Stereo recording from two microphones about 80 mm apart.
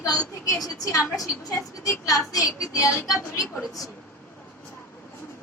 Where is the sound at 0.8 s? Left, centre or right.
Left.